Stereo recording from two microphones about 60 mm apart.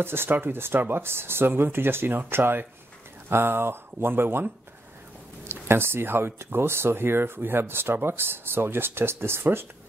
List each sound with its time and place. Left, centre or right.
0.0 s speech: right